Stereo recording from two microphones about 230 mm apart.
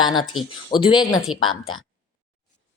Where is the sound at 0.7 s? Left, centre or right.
Centre.